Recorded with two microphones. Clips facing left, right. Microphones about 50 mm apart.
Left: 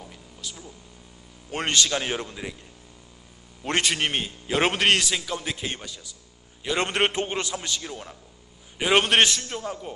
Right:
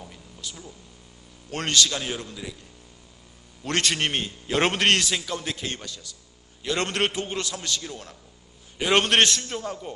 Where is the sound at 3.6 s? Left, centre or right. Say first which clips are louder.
Left 1 dB; left.